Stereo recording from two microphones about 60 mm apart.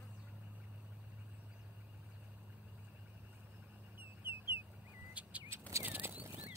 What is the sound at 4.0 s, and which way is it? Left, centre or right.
Chicken, right.